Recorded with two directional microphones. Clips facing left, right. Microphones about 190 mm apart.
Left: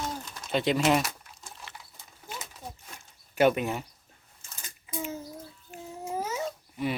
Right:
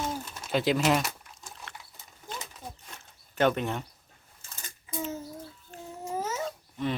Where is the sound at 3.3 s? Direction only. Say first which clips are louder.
Left 2 dB; 10° left (ahead or behind).